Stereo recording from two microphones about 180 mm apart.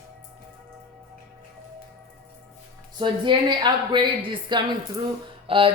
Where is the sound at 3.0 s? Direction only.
25° right (ahead or behind).